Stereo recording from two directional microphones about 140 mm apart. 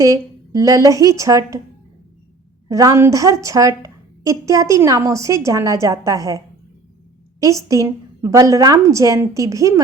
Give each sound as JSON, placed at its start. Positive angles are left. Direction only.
{"t": 0.0, "sound": "a woman's voice", "side_deg": -25}
{"t": 2.6, "sound": "a woman's voice", "side_deg": -25}